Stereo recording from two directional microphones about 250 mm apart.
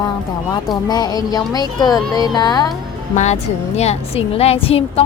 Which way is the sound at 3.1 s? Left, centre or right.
Left.